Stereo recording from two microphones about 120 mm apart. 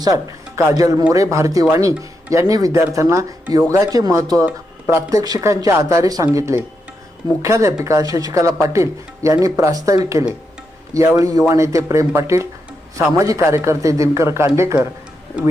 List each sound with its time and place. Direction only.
0.0 s speech: 30° right (ahead or behind)